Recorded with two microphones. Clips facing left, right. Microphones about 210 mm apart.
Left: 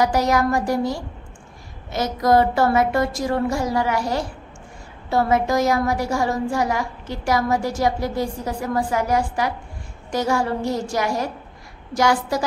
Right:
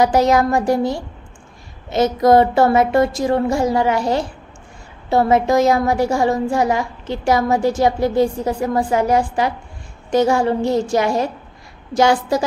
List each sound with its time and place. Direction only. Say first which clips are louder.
0.0 s a woman's voice: right 4 dB; 25° right (ahead or behind)